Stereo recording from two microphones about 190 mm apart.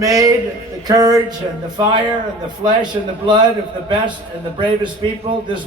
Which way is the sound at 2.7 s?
25° right (ahead or behind).